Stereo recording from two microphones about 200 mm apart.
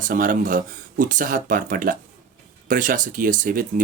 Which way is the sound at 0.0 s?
45° right (ahead or behind).